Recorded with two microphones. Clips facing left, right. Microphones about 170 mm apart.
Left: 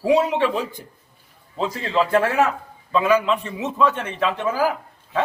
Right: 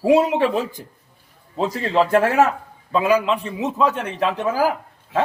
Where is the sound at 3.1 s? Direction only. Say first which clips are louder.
Even; centre (ahead or behind).